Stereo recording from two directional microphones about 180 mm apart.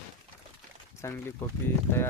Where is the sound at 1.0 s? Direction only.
15° left (ahead or behind).